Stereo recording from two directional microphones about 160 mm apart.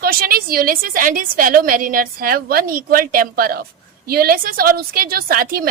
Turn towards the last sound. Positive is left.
turn(degrees=-65)  # may be behind; listen again after turning